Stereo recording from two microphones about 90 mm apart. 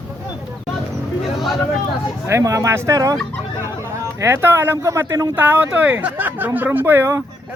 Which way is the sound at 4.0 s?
30° right (ahead or behind).